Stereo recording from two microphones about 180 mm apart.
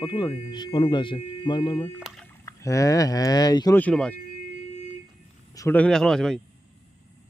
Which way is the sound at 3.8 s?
5° left (ahead or behind).